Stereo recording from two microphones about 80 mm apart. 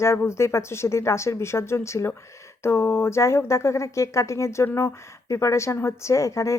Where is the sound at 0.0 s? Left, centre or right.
Left.